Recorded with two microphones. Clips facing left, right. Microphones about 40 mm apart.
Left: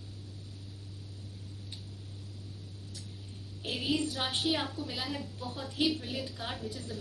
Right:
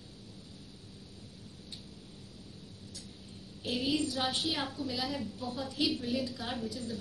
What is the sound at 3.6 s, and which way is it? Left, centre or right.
A woman's voice, left.